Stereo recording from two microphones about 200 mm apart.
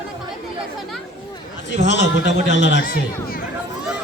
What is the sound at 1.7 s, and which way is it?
A man's voice, 60° left (ahead or behind).